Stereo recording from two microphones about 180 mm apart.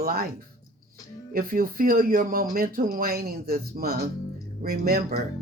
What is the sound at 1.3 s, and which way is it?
Speech, 50° right (ahead or behind).